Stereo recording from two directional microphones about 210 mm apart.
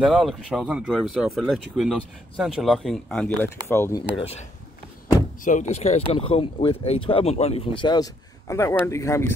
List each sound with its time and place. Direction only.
0.0 s speech: centre (ahead or behind)
5.4 s speech: 35° left (ahead or behind); by 9.3 s 15° left (ahead or behind)